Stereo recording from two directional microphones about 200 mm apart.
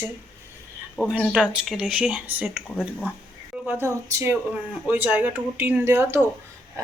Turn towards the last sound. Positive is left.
turn(degrees=-10)  # may be behind; listen again after turning